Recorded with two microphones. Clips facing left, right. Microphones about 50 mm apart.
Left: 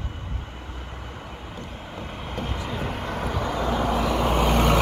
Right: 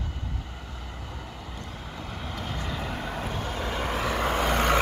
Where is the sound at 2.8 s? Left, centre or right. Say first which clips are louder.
Left 3 dB; left.